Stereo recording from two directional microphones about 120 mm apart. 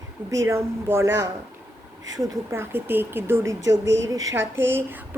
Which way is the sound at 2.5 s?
20° right (ahead or behind).